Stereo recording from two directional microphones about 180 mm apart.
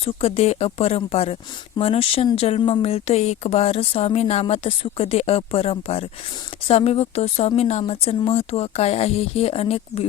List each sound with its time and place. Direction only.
0.0 s speech: 35° left (ahead or behind)